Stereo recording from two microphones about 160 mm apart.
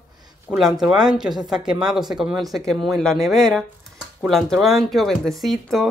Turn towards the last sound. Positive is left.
turn(degrees=0)  # may be behind; listen again after turning